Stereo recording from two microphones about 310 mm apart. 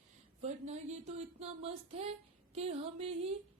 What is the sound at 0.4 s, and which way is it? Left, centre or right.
Speech, right.